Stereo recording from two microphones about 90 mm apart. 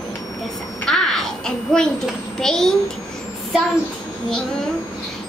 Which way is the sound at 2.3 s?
5° left (ahead or behind).